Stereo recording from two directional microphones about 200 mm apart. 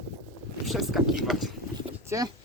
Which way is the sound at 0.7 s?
Centre (ahead or behind).